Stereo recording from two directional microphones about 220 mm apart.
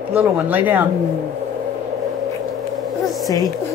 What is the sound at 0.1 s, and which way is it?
Speech, 10° right (ahead or behind).